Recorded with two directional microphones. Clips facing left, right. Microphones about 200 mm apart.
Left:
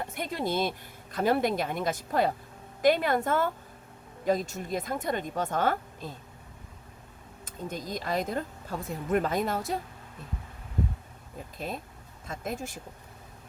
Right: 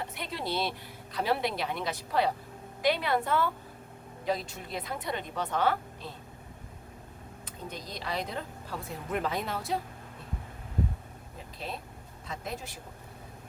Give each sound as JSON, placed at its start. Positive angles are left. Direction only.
{"t": 0.1, "sound": "speech", "side_deg": 45}
{"t": 7.4, "sound": "speech", "side_deg": 45}
{"t": 11.5, "sound": "speech", "side_deg": 50}